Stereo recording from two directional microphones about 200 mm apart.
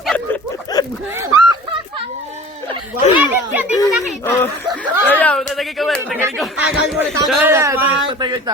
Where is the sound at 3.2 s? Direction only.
10° right (ahead or behind).